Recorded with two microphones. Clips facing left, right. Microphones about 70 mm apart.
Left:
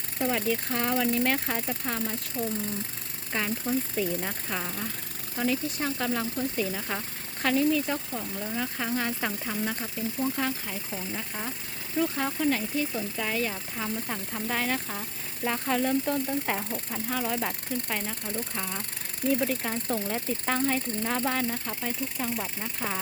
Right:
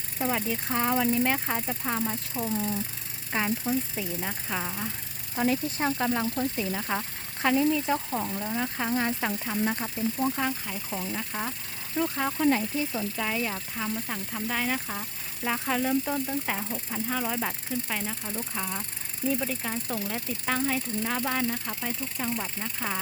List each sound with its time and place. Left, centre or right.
0.2 s speech: centre
2.3 s speech: right
3.3 s speech: centre
3.9 s speech: centre
5.5 s speech: right
6.7 s speech: centre
10.3 s speech: centre
13.1 s speech: centre